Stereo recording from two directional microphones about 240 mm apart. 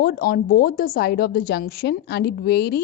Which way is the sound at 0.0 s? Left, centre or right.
Left.